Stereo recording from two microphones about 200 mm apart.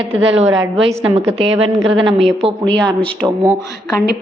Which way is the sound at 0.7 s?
25° right (ahead or behind).